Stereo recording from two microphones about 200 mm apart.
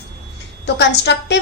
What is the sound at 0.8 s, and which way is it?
Speech, 60° left (ahead or behind).